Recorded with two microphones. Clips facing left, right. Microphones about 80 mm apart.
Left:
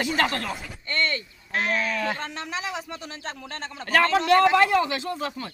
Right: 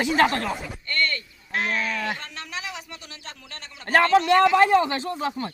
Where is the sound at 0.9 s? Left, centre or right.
Left.